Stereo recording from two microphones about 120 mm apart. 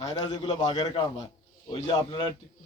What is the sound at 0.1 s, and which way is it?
A man's voice, 35° left (ahead or behind).